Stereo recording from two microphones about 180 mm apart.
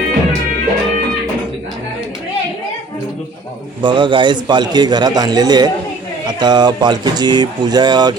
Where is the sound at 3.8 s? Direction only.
25° right (ahead or behind).